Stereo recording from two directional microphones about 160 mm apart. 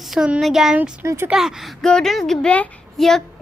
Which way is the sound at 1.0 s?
15° right (ahead or behind).